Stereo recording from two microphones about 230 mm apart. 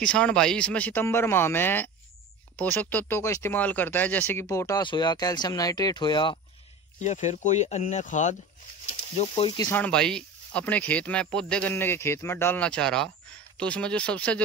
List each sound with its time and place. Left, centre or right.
0.0 s speech: centre; by 6.4 s left
7.0 s speech: left
9.7 s speech: centre